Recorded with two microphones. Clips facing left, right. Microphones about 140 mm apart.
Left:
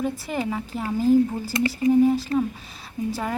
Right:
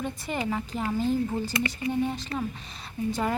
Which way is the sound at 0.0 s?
Centre (ahead or behind).